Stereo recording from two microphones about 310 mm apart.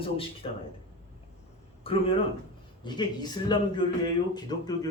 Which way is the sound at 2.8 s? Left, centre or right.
Centre.